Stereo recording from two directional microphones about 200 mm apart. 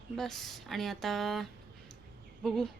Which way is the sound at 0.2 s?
Centre (ahead or behind).